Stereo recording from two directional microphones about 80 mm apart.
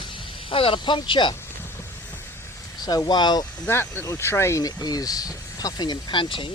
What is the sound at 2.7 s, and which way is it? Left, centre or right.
Speech, left.